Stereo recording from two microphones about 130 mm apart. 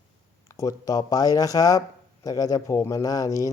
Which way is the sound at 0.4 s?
25° left (ahead or behind).